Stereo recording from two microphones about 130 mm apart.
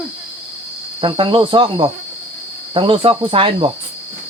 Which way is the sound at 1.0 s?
40° right (ahead or behind).